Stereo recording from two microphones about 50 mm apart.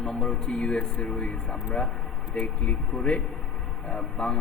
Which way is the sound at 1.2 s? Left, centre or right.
Centre.